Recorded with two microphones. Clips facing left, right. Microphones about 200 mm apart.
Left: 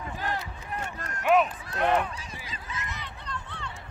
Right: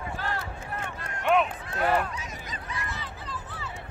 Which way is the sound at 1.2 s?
Centre (ahead or behind).